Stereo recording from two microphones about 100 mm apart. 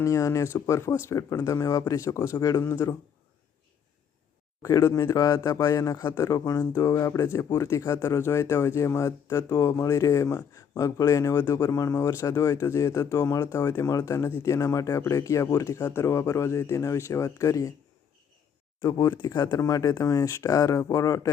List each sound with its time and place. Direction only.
0.0 s speech: 30° left (ahead or behind)
4.6 s speech: 30° left (ahead or behind)
18.8 s speech: 35° left (ahead or behind)
19.1 s speech: 50° left (ahead or behind)